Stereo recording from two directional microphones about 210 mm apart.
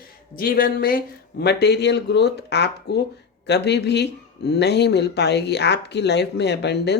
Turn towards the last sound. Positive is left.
turn(degrees=55)  # may be behind; listen again after turning